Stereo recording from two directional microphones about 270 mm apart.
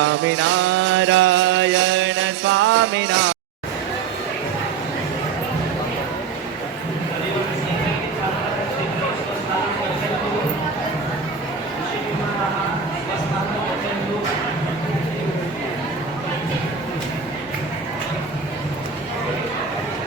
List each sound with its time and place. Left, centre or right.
0.0 s mantra: right